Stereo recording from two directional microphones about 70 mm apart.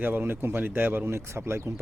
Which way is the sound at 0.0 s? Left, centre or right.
Right.